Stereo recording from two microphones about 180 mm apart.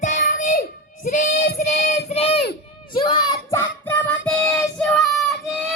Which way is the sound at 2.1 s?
35° left (ahead or behind).